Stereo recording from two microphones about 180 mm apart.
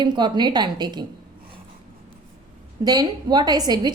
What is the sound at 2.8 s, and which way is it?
A woman's voice, 20° right (ahead or behind).